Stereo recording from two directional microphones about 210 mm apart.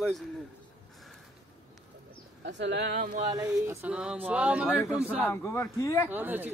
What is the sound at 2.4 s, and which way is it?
Speech, 55° right (ahead or behind).